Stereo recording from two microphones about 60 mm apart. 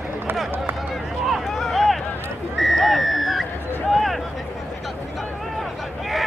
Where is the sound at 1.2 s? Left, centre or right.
Centre.